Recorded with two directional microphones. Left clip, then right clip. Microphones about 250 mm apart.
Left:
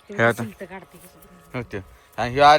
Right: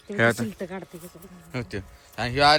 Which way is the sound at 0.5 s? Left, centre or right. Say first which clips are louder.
Right 2 dB; right.